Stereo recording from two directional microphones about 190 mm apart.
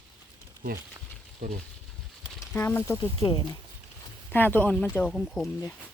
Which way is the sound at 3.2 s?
30° left (ahead or behind).